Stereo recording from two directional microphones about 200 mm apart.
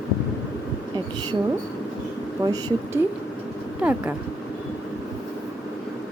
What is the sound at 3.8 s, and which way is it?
Speech, 10° right (ahead or behind).